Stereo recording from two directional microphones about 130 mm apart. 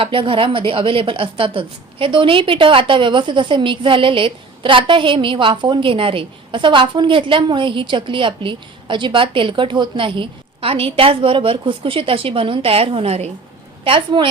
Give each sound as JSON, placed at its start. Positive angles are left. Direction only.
{"t": 0.0, "sound": "a woman's voice", "side_deg": -40}
{"t": 13.8, "sound": "a woman's voice", "side_deg": -40}